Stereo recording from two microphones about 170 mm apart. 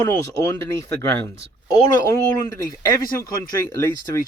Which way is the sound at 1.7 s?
25° left (ahead or behind).